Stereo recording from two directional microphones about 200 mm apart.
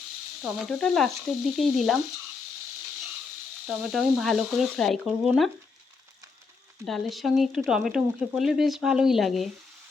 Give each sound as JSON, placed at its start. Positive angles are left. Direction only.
{"t": 0.4, "sound": "speech", "side_deg": 0}
{"t": 3.7, "sound": "speech", "side_deg": -5}
{"t": 6.8, "sound": "speech", "side_deg": 0}